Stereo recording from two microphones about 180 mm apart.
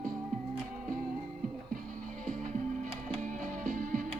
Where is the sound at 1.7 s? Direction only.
45° right (ahead or behind).